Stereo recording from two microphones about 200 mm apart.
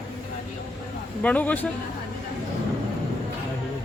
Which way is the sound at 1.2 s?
5° left (ahead or behind).